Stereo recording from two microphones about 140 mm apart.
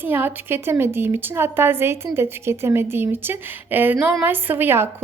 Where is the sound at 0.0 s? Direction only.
15° right (ahead or behind).